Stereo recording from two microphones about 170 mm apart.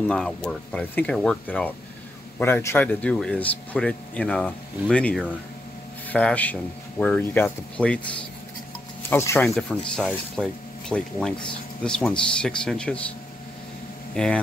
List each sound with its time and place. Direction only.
0.1 s speech: 5° left (ahead or behind)
9.1 s speech: 15° left (ahead or behind)
9.5 s speech: 5° left (ahead or behind)
14.1 s speech: 5° left (ahead or behind)